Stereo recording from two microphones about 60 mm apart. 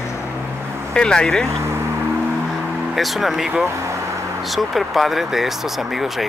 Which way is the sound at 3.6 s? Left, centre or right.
Right.